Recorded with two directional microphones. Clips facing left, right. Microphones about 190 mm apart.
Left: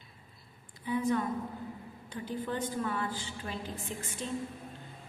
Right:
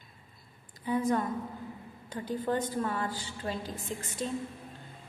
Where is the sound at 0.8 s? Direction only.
45° right (ahead or behind).